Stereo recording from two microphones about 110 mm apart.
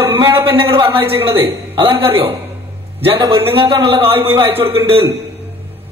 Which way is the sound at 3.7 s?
50° right (ahead or behind).